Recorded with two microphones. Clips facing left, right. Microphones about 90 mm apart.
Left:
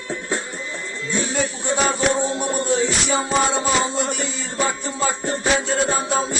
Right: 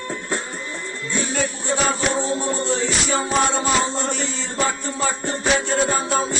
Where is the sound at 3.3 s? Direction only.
10° left (ahead or behind).